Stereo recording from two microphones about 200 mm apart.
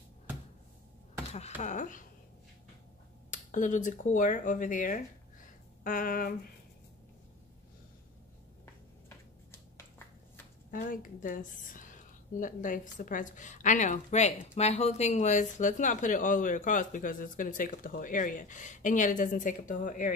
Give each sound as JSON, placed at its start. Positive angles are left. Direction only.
{"t": 1.6, "sound": "a woman's voice", "side_deg": 40}
{"t": 3.5, "sound": "a woman's voice", "side_deg": 40}
{"t": 5.9, "sound": "a sound", "side_deg": 45}
{"t": 10.7, "sound": "a woman's voice", "side_deg": 40}